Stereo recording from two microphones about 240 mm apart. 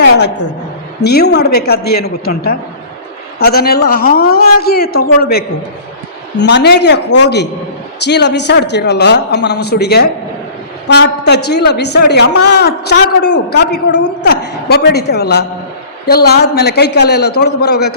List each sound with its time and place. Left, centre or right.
1.0 s a man's voice: left
11.4 s a man's voice: left